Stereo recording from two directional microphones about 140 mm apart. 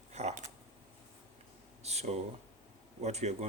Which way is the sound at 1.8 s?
50° right (ahead or behind).